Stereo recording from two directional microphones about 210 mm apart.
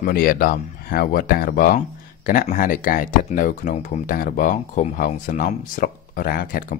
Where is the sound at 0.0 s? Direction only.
45° left (ahead or behind).